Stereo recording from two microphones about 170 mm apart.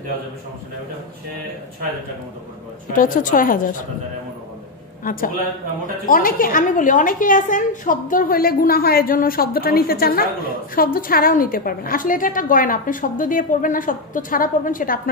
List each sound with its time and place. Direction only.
3.0 s a woman's voice: 50° left (ahead or behind)
5.0 s a woman's voice: 55° left (ahead or behind)